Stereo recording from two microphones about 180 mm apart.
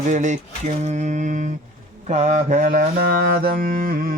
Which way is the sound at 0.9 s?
40° right (ahead or behind).